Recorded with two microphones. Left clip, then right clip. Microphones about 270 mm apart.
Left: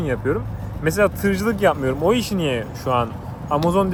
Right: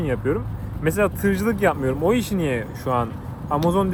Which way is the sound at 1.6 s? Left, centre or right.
Centre.